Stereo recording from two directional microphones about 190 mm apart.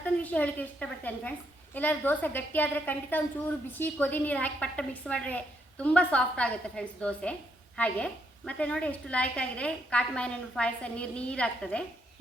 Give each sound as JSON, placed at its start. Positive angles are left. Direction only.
{"t": 0.0, "sound": "a woman's voice", "side_deg": 10}